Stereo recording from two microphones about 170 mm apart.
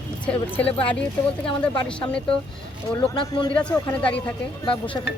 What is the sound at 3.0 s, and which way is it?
Speech, 30° left (ahead or behind).